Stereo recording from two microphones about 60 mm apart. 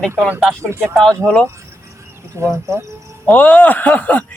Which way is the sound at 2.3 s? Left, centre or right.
Right.